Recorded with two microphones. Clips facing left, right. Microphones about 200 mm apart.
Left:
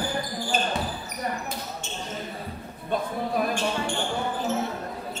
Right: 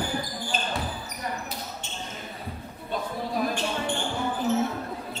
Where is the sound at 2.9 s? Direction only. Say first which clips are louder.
Left 4 dB; 50° left (ahead or behind).